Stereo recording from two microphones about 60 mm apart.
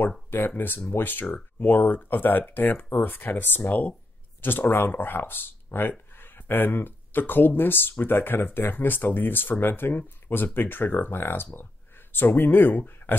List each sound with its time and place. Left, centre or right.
0.5 s speech: left